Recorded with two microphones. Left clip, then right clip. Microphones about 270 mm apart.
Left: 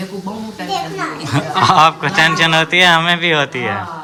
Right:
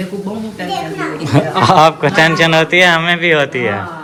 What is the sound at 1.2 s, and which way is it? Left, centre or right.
A man's voice, centre.